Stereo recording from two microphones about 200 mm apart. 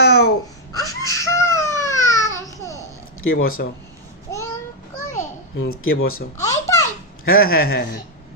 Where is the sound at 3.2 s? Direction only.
90° left.